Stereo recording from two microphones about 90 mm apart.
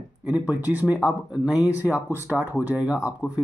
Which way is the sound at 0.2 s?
15° right (ahead or behind).